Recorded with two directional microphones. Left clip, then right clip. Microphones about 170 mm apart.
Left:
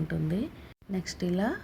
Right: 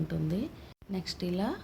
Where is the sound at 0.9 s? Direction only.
20° left (ahead or behind).